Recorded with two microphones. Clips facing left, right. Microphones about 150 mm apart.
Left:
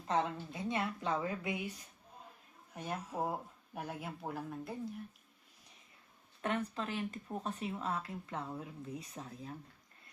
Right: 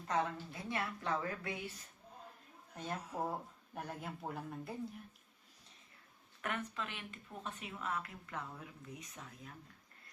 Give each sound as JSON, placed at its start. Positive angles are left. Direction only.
{"t": 0.1, "sound": "a woman's voice", "side_deg": 20}
{"t": 2.7, "sound": "speech", "side_deg": 10}
{"t": 6.4, "sound": "speech", "side_deg": 30}